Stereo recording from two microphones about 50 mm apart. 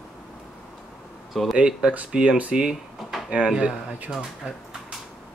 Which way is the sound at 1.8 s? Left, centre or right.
Right.